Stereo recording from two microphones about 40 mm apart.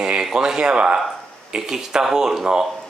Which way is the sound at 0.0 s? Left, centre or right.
Centre.